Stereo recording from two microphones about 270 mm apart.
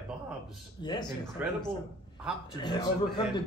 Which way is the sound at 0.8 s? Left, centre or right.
Centre.